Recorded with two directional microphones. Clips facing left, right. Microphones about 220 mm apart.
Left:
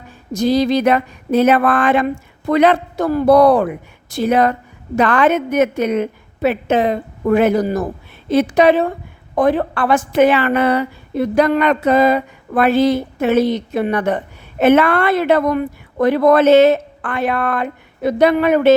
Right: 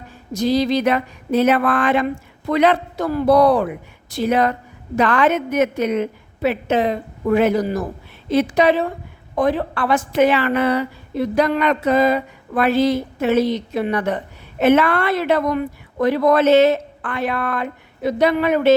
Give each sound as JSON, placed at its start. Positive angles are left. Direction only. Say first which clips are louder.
{"t": 0.3, "sound": "a woman's voice", "louder": "left 3 dB", "side_deg": 50}